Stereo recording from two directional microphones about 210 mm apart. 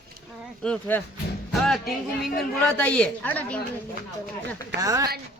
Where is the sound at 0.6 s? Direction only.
5° left (ahead or behind).